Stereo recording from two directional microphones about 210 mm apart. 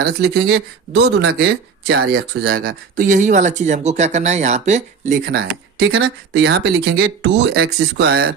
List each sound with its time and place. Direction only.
0.0 s speech: 50° right (ahead or behind)
5.4 s speech: 50° right (ahead or behind)